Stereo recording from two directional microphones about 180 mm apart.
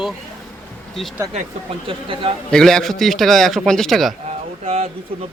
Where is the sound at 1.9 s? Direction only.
30° right (ahead or behind).